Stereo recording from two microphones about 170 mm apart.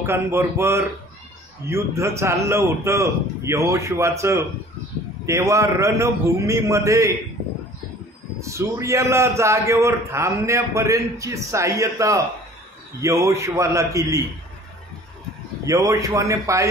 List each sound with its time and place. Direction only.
0.0 s a man's voice: 15° right (ahead or behind)
8.4 s a man's voice: 15° right (ahead or behind)
15.6 s a man's voice: 20° right (ahead or behind)